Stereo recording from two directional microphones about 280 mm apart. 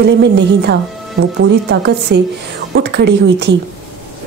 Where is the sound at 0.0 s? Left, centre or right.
Right.